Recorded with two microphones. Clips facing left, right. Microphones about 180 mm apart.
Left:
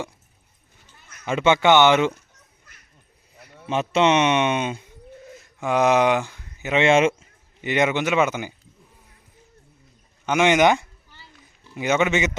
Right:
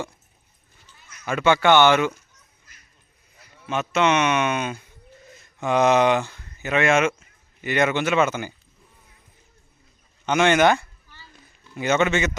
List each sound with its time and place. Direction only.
1.2 s speech: 20° left (ahead or behind)
3.3 s sheep: 60° left (ahead or behind)
3.7 s speech: 30° left (ahead or behind)
5.3 s speech: 10° left (ahead or behind)
10.2 s speech: 15° left (ahead or behind)